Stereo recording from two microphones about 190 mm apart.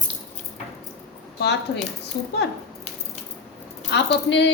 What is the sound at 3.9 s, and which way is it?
Speech, 65° left (ahead or behind).